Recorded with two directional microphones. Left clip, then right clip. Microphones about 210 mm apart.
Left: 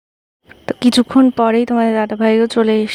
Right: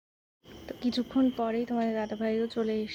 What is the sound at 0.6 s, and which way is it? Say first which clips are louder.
Speech: left 18 dB; 50° left (ahead or behind).